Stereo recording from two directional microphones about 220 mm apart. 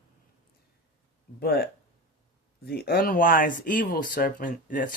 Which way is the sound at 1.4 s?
45° left (ahead or behind).